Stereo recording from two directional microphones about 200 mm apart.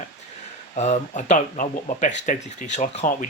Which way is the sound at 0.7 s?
35° left (ahead or behind).